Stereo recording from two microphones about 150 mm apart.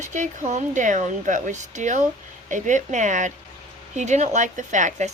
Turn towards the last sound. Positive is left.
turn(degrees=-55)  # may be behind; listen again after turning